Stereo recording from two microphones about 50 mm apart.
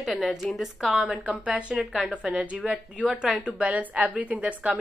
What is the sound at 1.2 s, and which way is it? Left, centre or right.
Speech, right.